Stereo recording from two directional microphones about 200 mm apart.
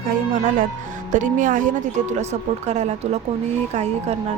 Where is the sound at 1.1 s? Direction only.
40° right (ahead or behind).